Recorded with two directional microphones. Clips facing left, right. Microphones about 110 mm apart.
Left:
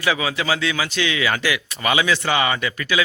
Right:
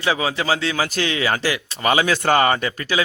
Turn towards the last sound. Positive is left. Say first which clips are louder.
# right 1 dB
turn(degrees=-35)  # may be behind; listen again after turning